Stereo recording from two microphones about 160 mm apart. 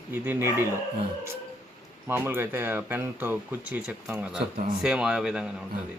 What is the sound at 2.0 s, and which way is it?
Speech, 15° right (ahead or behind).